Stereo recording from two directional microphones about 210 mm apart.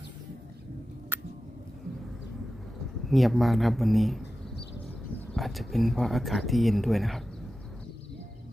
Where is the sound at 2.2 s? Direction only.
Centre (ahead or behind).